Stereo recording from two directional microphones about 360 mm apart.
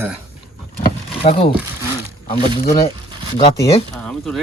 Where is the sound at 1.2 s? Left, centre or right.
Centre.